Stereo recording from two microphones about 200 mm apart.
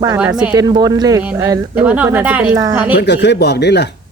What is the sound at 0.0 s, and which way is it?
Speech, 15° right (ahead or behind).